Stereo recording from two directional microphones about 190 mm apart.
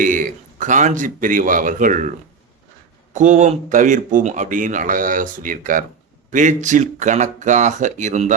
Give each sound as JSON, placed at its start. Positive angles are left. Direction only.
{"t": 0.0, "sound": "speech", "side_deg": -45}